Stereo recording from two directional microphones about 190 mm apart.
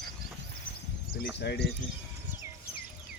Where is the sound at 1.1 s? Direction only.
60° left (ahead or behind).